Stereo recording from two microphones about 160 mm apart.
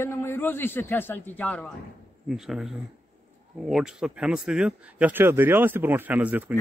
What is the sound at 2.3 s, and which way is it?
Speech, 5° right (ahead or behind).